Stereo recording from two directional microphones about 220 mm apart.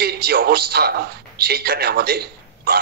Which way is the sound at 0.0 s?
45° right (ahead or behind).